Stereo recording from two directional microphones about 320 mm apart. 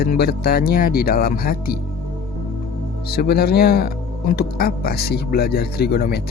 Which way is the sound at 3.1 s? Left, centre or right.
Left.